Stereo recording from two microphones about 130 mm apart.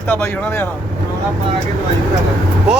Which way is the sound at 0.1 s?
15° left (ahead or behind).